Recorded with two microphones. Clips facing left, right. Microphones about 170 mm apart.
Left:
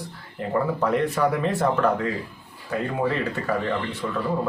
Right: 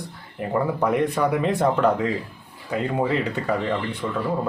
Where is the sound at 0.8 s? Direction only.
15° right (ahead or behind).